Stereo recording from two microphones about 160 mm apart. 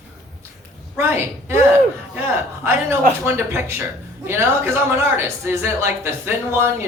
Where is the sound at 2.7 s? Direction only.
15° right (ahead or behind).